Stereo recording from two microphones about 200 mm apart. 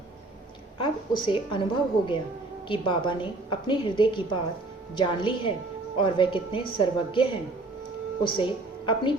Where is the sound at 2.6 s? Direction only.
25° left (ahead or behind).